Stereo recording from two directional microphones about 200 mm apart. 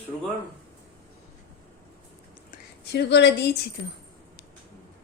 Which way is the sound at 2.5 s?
55° left (ahead or behind).